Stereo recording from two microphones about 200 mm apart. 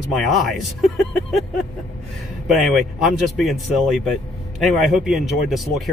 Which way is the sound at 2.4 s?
Centre (ahead or behind).